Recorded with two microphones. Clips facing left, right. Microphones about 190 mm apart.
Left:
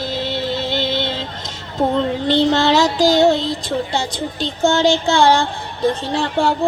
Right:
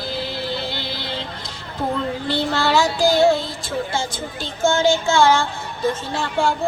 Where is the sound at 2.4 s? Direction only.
40° left (ahead or behind).